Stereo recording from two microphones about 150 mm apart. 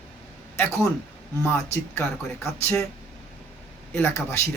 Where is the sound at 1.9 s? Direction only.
15° left (ahead or behind).